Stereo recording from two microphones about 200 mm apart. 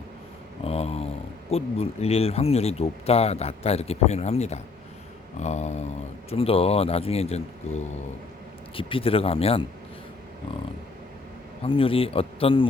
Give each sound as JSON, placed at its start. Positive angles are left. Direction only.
{"t": 0.6, "sound": "speech", "side_deg": 30}
{"t": 5.4, "sound": "a sound", "side_deg": 35}
{"t": 6.3, "sound": "speech", "side_deg": 30}
{"t": 11.6, "sound": "speech", "side_deg": 25}